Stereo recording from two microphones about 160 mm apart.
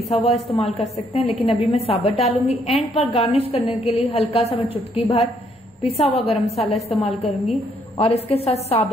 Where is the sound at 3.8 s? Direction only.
40° left (ahead or behind).